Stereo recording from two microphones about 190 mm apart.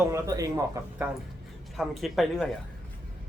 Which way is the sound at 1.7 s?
Centre (ahead or behind).